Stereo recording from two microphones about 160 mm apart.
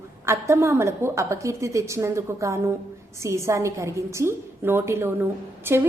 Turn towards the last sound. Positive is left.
turn(degrees=-15)  # may be behind; listen again after turning